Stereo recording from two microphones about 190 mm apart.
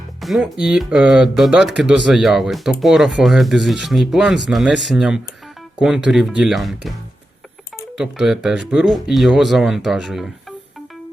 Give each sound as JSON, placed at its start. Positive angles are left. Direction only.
{"t": 0.2, "sound": "speech", "side_deg": 0}
{"t": 7.9, "sound": "speech", "side_deg": -5}